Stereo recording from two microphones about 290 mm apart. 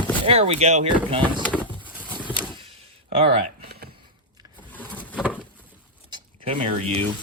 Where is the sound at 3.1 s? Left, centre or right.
Right.